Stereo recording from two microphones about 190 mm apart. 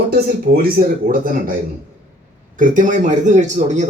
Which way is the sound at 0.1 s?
55° right (ahead or behind).